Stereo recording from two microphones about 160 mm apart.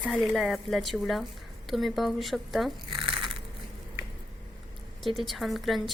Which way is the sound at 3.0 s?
30° right (ahead or behind).